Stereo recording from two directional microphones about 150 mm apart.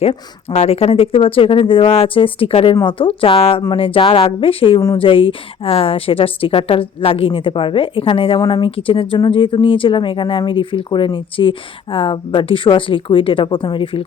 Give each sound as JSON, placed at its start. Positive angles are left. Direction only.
{"t": 0.0, "sound": "a woman's voice", "side_deg": 45}